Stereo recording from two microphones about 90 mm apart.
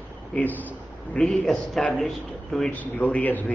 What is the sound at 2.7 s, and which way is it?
Speech, 15° left (ahead or behind).